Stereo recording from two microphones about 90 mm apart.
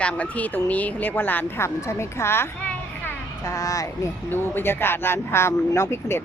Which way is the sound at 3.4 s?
40° left (ahead or behind).